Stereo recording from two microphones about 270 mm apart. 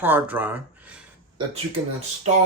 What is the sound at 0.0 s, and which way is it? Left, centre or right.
Speech, centre.